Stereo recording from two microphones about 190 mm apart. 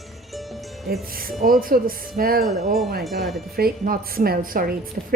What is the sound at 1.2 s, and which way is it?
A woman's voice, 45° right (ahead or behind).